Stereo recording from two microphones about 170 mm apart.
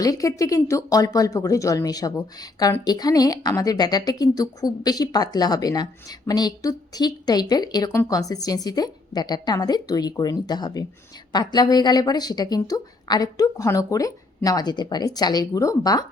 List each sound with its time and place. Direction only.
0.0 s speech: 20° left (ahead or behind)